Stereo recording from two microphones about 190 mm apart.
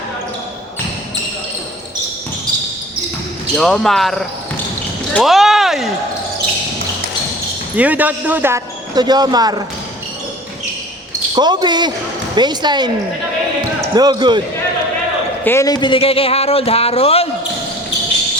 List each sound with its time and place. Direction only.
3.5 s speech: centre (ahead or behind)
7.8 s speech: 10° right (ahead or behind)
11.3 s speech: 20° right (ahead or behind)
13.9 s speech: 20° right (ahead or behind)
15.4 s speech: 15° left (ahead or behind)